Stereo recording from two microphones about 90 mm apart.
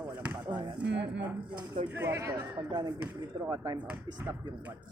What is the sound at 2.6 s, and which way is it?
Speech, 55° right (ahead or behind).